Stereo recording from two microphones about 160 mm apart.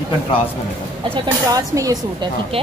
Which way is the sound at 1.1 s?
25° right (ahead or behind).